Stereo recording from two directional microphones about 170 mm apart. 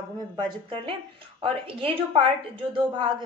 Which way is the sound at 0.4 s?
30° right (ahead or behind).